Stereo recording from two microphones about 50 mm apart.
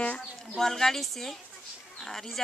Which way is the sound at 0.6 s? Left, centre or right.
Centre.